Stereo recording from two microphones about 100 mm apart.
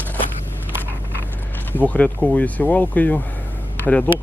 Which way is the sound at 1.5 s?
15° left (ahead or behind).